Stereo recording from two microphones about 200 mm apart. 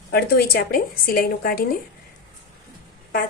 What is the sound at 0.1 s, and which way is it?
Speech, 55° left (ahead or behind).